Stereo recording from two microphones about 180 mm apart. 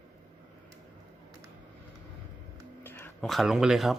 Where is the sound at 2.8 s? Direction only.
10° left (ahead or behind).